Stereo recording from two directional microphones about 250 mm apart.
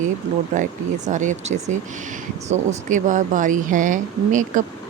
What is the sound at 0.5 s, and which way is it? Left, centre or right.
Speech, right.